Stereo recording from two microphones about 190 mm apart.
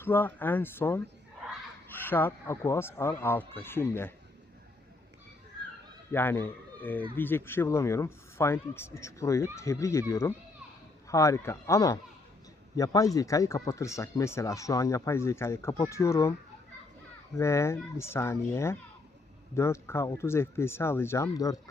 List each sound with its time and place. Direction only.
0.0 s speech: 10° left (ahead or behind)
6.1 s speech: 10° left (ahead or behind)
17.3 s speech: 15° left (ahead or behind)